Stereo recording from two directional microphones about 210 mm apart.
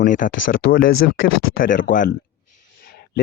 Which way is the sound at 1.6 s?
40° left (ahead or behind).